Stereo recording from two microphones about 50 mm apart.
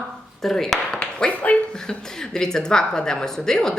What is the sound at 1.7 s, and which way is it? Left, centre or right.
A woman's voice, centre.